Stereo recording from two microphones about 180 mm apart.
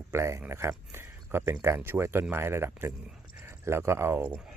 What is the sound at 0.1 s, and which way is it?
Speech, 15° right (ahead or behind).